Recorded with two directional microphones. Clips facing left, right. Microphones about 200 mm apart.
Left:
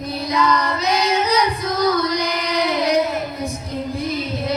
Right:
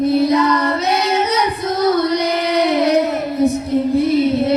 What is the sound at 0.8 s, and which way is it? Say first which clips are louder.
Child singing: right 2 dB; 25° right (ahead or behind).